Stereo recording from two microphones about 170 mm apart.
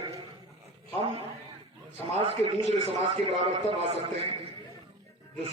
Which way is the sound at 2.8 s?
40° right (ahead or behind).